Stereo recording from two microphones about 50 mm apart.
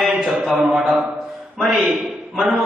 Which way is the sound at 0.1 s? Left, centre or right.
Centre.